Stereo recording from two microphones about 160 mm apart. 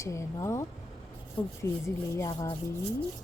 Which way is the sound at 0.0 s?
20° left (ahead or behind).